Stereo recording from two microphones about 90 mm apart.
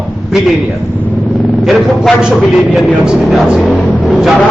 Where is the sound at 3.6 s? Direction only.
15° left (ahead or behind).